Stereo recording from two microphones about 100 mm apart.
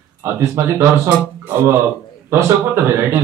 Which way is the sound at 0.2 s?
25° right (ahead or behind).